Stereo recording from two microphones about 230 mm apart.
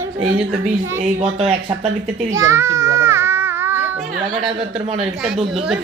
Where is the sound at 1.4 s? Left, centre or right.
Right.